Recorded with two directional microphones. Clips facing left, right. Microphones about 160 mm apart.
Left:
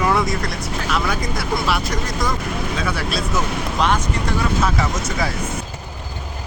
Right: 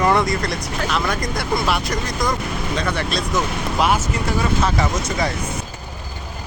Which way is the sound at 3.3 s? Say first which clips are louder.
Right 2 dB; 5° right (ahead or behind).